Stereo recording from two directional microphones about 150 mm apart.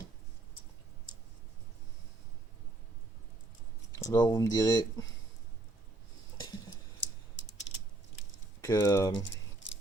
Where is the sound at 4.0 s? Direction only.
25° left (ahead or behind).